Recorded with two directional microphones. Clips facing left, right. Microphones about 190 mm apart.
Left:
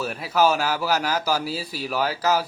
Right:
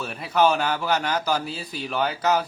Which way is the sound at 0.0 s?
5° left (ahead or behind).